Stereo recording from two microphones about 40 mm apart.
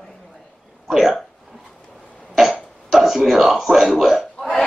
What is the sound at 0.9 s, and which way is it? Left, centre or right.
Speech, centre.